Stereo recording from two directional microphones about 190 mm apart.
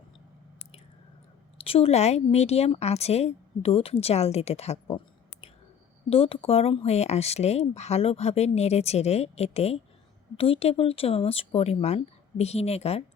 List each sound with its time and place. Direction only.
1.6 s a woman's voice: 30° left (ahead or behind)